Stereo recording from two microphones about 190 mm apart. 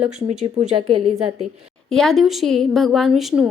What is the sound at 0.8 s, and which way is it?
Speech, 25° right (ahead or behind).